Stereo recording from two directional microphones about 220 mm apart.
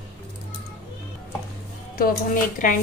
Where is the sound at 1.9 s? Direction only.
40° left (ahead or behind).